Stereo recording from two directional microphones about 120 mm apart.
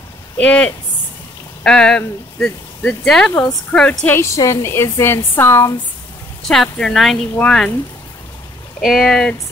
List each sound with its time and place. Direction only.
0.4 s speech: 10° left (ahead or behind)
4.0 s speech: 20° left (ahead or behind)
6.4 s speech: 5° left (ahead or behind)
8.8 s speech: centre (ahead or behind)